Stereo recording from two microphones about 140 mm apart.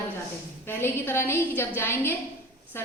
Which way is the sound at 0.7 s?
15° left (ahead or behind).